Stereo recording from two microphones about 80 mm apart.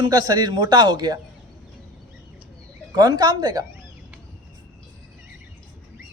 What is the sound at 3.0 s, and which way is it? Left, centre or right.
Speech, right.